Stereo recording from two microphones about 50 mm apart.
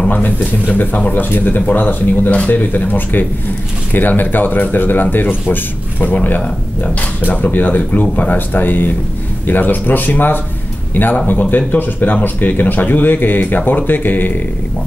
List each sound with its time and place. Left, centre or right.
0.1 s speech: left